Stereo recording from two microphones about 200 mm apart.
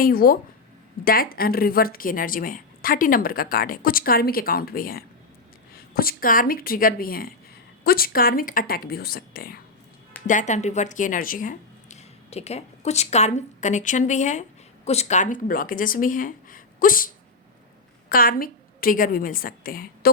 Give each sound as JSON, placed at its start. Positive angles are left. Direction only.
{"t": 0.0, "sound": "speech", "side_deg": 50}
{"t": 10.2, "sound": "speech", "side_deg": 40}
{"t": 18.1, "sound": "a woman's voice", "side_deg": 45}